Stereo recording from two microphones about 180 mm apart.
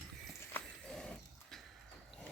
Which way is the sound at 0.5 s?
5° left (ahead or behind).